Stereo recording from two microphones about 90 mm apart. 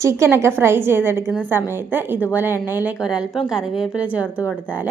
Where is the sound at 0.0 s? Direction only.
30° right (ahead or behind).